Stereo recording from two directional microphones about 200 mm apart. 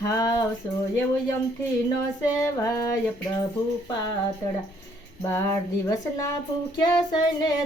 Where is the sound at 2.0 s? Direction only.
15° left (ahead or behind).